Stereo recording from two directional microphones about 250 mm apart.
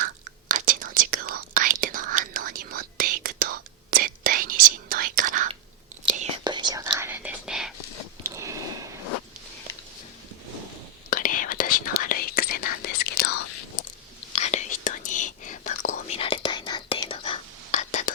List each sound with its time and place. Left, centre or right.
0.5 s whispering: right
6.4 s whispering: centre
8.2 s a sound: centre
11.1 s whispering: left
14.3 s whispering: left